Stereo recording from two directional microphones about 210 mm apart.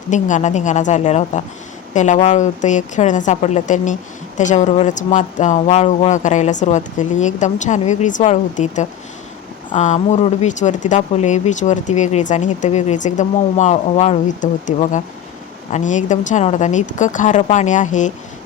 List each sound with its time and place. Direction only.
0.1 s speech: 35° left (ahead or behind)